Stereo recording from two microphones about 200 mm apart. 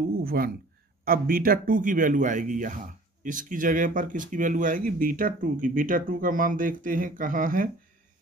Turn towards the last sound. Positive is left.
turn(degrees=-45)  # may be behind; listen again after turning